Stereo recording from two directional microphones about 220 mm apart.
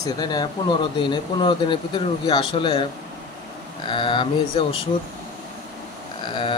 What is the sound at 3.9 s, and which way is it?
Speech, 20° left (ahead or behind).